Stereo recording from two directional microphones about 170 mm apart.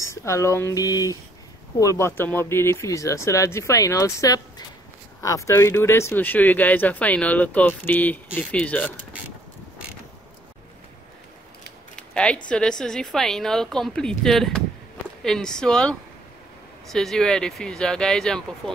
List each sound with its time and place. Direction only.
0.0 s speech: 15° left (ahead or behind)
11.9 s a sound: 5° left (ahead or behind)
12.4 s a woman's voice: 5° left (ahead or behind)